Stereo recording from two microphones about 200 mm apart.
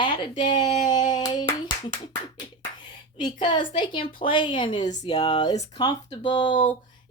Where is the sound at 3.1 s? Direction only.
20° left (ahead or behind).